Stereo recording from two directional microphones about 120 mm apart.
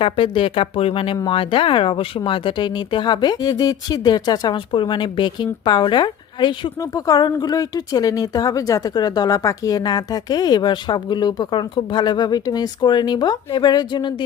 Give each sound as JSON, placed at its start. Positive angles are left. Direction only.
{"t": 0.0, "sound": "speech", "side_deg": 50}